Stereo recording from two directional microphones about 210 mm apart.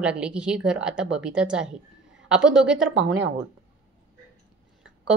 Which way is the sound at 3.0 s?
55° right (ahead or behind).